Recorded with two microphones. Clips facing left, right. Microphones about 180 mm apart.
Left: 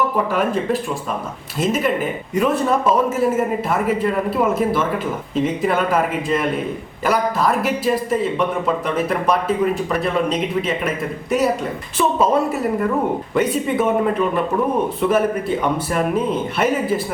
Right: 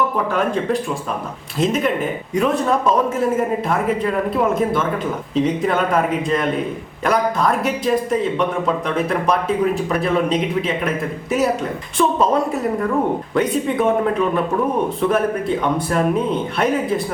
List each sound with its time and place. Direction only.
0.3 s speech: 5° left (ahead or behind)